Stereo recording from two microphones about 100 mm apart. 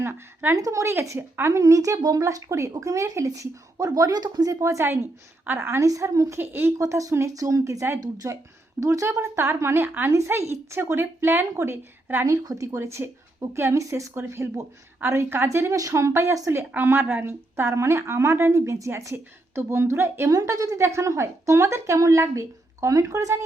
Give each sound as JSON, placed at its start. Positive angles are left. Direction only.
{"t": 0.0, "sound": "a woman's voice", "side_deg": -25}
{"t": 0.5, "sound": "a woman's voice", "side_deg": -35}
{"t": 6.4, "sound": "a woman's voice", "side_deg": -20}
{"t": 12.2, "sound": "a woman's voice", "side_deg": -35}